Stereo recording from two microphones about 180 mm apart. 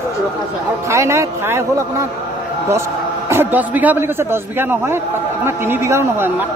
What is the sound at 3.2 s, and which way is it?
A man's voice, 10° right (ahead or behind).